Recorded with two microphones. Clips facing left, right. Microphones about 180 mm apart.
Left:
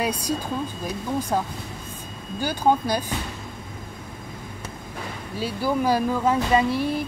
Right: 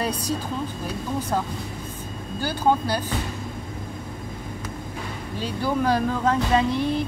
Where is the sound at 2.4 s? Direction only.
15° left (ahead or behind).